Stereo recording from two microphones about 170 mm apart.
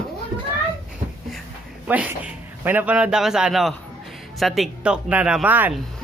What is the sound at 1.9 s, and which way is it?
Speech, 10° right (ahead or behind).